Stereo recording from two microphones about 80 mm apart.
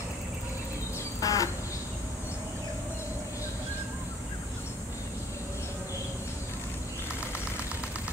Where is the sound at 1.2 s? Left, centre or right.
Left.